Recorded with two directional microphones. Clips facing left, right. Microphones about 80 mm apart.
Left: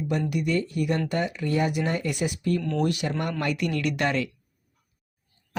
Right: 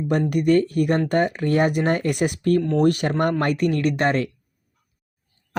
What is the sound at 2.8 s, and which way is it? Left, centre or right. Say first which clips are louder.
Speech: right 7 dB; right.